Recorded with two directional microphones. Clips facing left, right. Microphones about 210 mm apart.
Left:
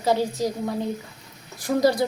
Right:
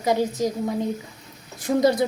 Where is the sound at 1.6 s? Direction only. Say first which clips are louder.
Right 1 dB; 25° right (ahead or behind).